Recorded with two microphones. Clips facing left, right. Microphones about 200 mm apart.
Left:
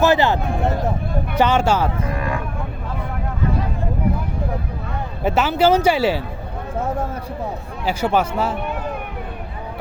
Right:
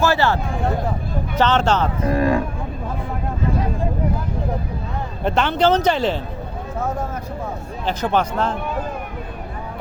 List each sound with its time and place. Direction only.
0.0 s speech: 20° left (ahead or behind)
1.4 s speech: 10° left (ahead or behind)
2.0 s speech: 35° right (ahead or behind)
5.2 s speech: 5° left (ahead or behind)
7.9 s speech: 10° left (ahead or behind)